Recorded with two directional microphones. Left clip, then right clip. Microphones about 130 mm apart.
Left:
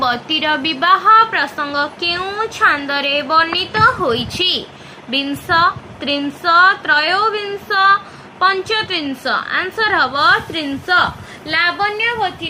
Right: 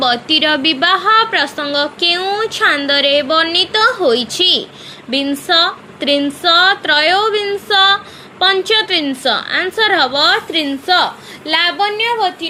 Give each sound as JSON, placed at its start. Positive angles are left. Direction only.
{"t": 0.0, "sound": "a woman's voice", "side_deg": -45}